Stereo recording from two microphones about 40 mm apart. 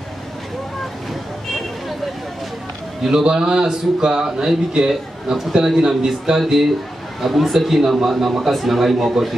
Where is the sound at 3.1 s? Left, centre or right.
Centre.